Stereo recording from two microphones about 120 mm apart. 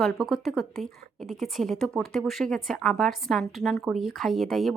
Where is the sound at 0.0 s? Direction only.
Centre (ahead or behind).